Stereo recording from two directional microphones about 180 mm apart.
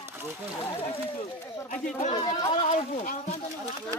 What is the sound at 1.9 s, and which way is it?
Speech, 30° left (ahead or behind).